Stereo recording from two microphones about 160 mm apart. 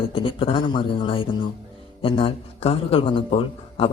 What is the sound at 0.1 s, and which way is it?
Speech, 35° left (ahead or behind).